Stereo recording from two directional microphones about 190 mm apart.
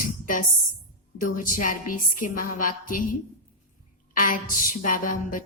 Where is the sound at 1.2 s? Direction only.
45° left (ahead or behind).